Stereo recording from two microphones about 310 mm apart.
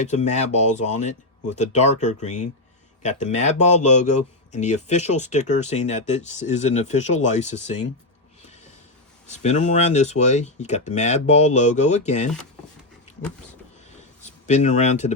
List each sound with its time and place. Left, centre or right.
0.0 s speech: left
9.2 s speech: left
14.4 s speech: left